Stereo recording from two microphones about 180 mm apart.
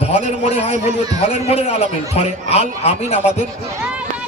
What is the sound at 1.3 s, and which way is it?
A man's voice, 35° left (ahead or behind).